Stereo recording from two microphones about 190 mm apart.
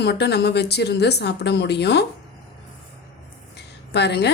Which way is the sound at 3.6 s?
60° left (ahead or behind).